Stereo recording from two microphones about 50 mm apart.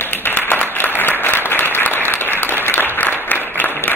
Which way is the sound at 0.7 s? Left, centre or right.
Left.